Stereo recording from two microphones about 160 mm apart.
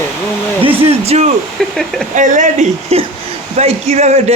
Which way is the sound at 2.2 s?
50° right (ahead or behind).